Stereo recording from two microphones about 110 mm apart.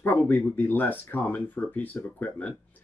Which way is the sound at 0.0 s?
15° left (ahead or behind).